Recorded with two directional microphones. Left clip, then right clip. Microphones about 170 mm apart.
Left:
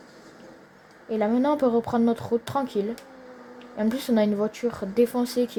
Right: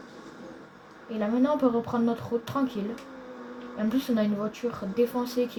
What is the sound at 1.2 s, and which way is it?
Speech, 90° left.